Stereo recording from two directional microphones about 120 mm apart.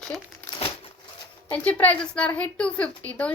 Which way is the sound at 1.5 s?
10° left (ahead or behind).